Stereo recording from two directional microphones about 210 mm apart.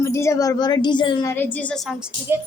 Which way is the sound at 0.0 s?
15° left (ahead or behind).